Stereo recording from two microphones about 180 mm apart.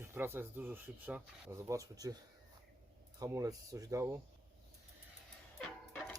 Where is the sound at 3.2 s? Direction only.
20° right (ahead or behind).